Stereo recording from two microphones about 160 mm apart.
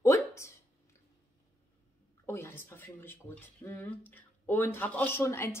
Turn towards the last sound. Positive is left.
turn(degrees=15)  # may be behind; listen again after turning